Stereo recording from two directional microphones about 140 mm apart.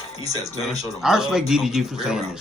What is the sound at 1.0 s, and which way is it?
A man's voice, 5° right (ahead or behind).